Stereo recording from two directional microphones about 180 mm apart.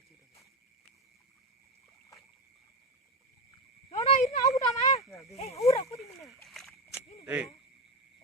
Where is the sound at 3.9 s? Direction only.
35° left (ahead or behind).